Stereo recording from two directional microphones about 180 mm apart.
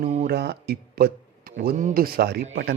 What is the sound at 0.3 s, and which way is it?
Speech, 65° right (ahead or behind).